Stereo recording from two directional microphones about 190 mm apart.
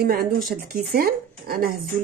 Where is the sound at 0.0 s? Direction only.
55° right (ahead or behind).